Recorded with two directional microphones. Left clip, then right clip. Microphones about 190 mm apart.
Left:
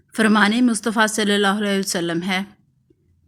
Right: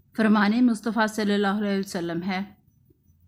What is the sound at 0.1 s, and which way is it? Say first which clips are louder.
A woman's voice: left 6 dB; 25° left (ahead or behind).